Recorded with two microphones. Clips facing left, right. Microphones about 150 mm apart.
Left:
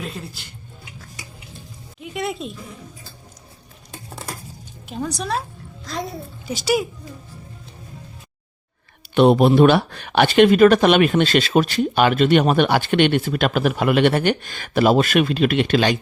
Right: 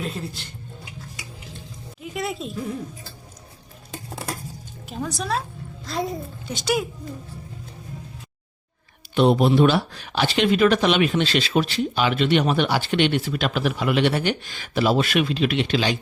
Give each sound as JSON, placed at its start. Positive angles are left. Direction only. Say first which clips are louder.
{"t": 0.0, "sound": "a woman's voice", "louder": "right 2 dB", "side_deg": 0}
{"t": 2.0, "sound": "a woman's voice", "louder": "left 2 dB", "side_deg": 0}
{"t": 4.9, "sound": "a woman's voice", "louder": "left 2 dB", "side_deg": 0}
{"t": 9.1, "sound": "speech", "louder": "left 4 dB", "side_deg": 60}